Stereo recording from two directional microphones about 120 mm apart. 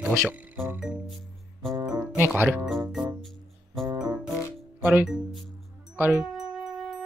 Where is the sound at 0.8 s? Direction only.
5° right (ahead or behind).